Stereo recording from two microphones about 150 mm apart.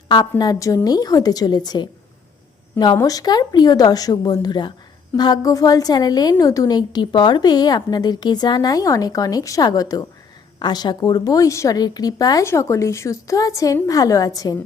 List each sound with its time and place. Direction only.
0.1 s a woman's voice: 25° left (ahead or behind)